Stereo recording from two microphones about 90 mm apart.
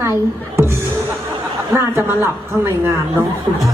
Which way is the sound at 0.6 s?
30° right (ahead or behind).